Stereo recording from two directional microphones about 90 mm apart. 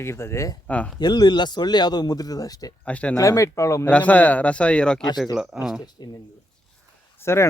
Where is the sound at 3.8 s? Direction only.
15° left (ahead or behind).